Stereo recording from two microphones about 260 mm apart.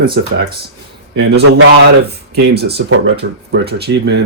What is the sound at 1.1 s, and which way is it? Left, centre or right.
Speech, right.